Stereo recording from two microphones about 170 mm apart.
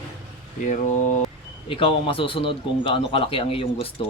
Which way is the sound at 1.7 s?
30° left (ahead or behind).